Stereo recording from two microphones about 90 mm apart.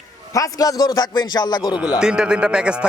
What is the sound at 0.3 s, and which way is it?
Speech, 40° left (ahead or behind).